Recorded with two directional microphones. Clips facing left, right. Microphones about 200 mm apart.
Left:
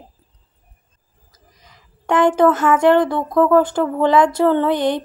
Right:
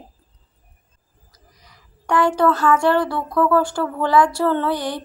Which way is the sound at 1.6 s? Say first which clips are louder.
Left 4 dB; 20° left (ahead or behind).